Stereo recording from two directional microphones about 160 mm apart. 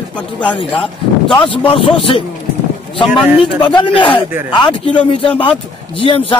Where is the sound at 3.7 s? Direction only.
30° left (ahead or behind).